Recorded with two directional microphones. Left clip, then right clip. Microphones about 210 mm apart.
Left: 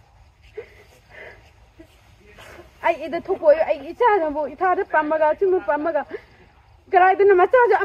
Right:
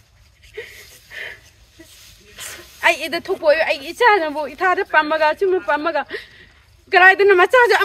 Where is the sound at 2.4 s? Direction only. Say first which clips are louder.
Right 8 dB; 20° right (ahead or behind).